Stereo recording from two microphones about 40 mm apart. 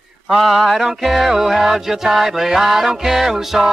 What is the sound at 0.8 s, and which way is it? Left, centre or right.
Mantra, centre.